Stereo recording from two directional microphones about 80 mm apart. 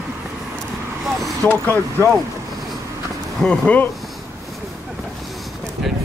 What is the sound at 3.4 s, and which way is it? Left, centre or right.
Speech, centre.